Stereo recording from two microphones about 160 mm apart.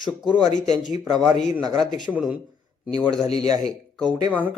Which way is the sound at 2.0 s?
10° right (ahead or behind).